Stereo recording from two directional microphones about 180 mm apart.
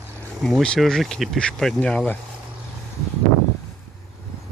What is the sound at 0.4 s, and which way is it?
Speech, 5° left (ahead or behind).